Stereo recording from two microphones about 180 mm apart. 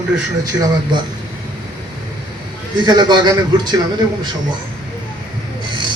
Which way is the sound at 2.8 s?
25° right (ahead or behind).